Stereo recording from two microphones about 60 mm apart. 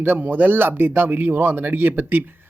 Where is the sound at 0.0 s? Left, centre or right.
Right.